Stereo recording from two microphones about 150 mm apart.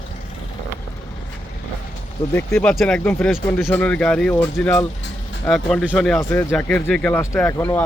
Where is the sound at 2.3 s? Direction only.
15° left (ahead or behind).